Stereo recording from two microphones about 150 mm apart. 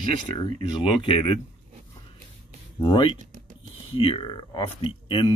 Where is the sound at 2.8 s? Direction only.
35° left (ahead or behind).